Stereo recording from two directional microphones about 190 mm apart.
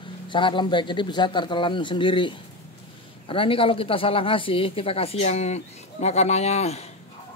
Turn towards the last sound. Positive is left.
turn(degrees=35)  # may be behind; listen again after turning